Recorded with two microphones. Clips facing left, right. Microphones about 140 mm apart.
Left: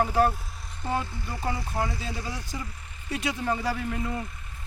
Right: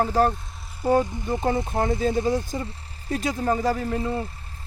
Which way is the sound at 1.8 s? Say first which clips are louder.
Right 10 dB; 50° right (ahead or behind).